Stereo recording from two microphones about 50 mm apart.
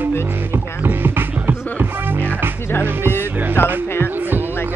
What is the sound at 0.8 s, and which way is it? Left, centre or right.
Music, right.